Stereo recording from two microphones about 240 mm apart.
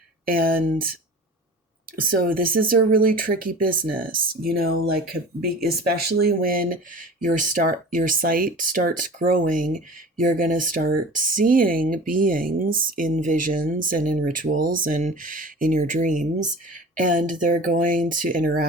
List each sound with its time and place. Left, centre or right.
0.3 s speech: right
2.0 s speech: right
6.1 s speech: right